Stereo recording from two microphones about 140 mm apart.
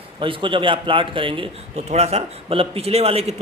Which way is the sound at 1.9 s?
50° right (ahead or behind).